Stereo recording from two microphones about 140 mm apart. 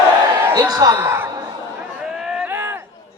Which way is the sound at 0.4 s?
20° right (ahead or behind).